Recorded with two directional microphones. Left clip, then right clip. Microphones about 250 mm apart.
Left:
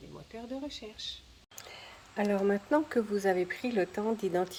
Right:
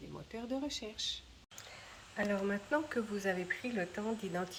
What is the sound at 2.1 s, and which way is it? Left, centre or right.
Speech, left.